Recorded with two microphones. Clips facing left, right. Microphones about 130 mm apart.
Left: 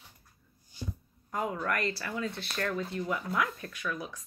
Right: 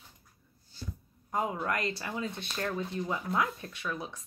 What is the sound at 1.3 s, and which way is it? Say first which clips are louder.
A woman's voice: right 1 dB; 20° right (ahead or behind).